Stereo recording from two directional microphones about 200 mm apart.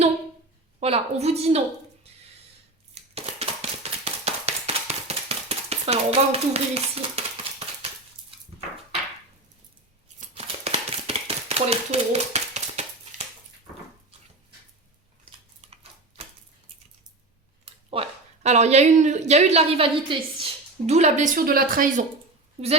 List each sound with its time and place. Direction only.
0.8 s a woman's voice: 30° right (ahead or behind)
2.9 s tap: 30° right (ahead or behind)
7.8 s dishes: 30° right (ahead or behind)
10.2 s a sound: 30° right (ahead or behind)
15.6 s typewriter: 30° right (ahead or behind)
17.9 s a woman's voice: 30° right (ahead or behind)